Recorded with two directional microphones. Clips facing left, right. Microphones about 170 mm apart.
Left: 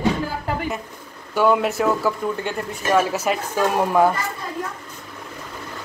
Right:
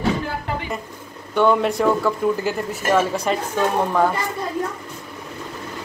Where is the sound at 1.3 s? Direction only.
5° left (ahead or behind).